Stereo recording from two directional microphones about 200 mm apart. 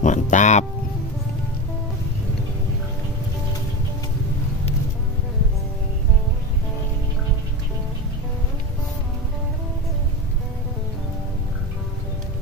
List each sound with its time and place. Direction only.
0.0 s music: 40° left (ahead or behind)